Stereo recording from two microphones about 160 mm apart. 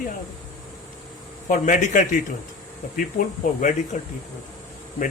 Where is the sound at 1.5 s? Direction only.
55° left (ahead or behind).